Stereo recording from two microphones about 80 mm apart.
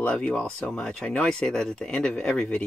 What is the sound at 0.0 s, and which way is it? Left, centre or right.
Speech, centre.